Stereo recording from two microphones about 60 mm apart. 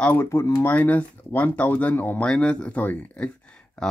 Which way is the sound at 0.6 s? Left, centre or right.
Left.